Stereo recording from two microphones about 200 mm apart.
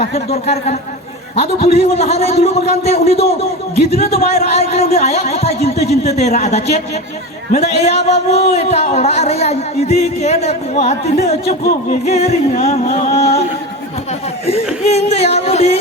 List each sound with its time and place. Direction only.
0.0 s speech: 30° left (ahead or behind)
11.6 s a sound: 50° left (ahead or behind)
12.0 s speech: 35° left (ahead or behind)
14.8 s speech: 30° left (ahead or behind)